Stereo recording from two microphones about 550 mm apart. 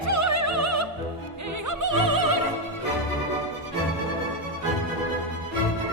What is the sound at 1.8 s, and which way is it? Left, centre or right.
Opera, right.